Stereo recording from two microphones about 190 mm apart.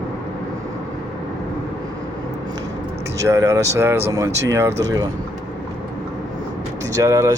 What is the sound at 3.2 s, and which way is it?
Speech, 15° right (ahead or behind).